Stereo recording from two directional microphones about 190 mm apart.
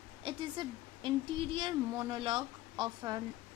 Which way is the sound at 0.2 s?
25° right (ahead or behind).